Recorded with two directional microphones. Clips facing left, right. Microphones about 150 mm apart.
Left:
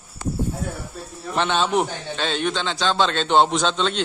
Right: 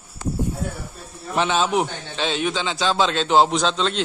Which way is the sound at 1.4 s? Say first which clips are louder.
Even; 5° right (ahead or behind).